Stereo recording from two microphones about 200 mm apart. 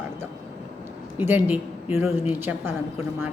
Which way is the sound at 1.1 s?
10° right (ahead or behind).